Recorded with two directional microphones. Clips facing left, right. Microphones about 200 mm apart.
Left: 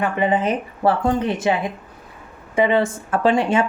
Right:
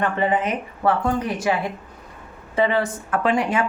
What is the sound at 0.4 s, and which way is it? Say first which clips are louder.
Speech: left 3 dB; 30° left (ahead or behind).